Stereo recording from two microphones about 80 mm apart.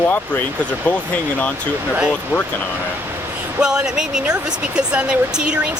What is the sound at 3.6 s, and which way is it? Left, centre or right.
Speech, centre.